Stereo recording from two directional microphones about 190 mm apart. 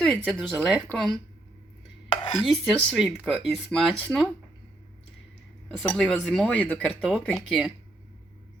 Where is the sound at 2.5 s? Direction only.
Centre (ahead or behind).